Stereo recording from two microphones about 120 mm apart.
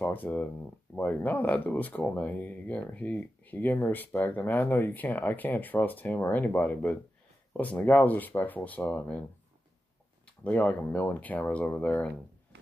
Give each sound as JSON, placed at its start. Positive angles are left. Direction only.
{"t": 0.0, "sound": "speech", "side_deg": 15}
{"t": 10.2, "sound": "speech", "side_deg": 10}